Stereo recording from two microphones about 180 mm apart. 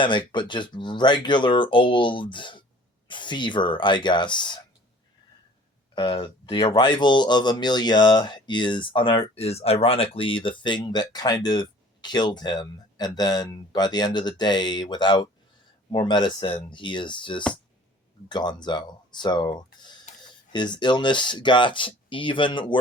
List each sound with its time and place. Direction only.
0.0 s speech: 25° left (ahead or behind)
5.9 s speech: 30° left (ahead or behind)